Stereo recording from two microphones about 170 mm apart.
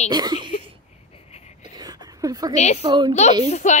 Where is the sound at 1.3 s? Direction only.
40° left (ahead or behind).